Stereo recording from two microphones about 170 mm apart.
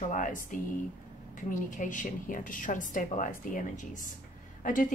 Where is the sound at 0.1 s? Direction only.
50° left (ahead or behind).